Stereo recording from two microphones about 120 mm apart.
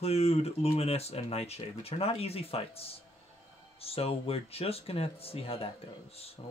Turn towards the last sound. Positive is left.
turn(degrees=55)  # may be behind; listen again after turning